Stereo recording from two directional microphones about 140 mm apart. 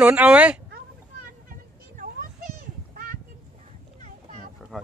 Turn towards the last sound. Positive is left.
turn(degrees=0)  # may be behind; listen again after turning